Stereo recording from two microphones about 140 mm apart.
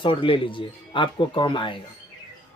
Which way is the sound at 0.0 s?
35° left (ahead or behind).